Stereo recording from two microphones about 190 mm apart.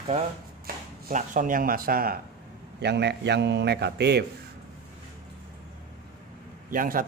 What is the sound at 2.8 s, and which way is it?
A man's voice, 60° right (ahead or behind).